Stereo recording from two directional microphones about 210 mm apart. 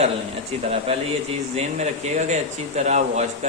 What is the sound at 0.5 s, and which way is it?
Speech, 30° right (ahead or behind).